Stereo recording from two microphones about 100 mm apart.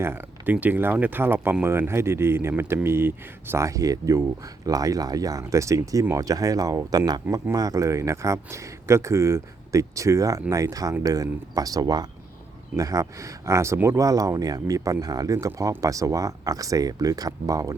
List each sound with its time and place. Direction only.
0.0 s speech: 20° right (ahead or behind)